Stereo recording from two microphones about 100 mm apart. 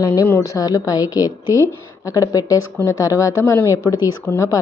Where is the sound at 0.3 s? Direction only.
30° left (ahead or behind).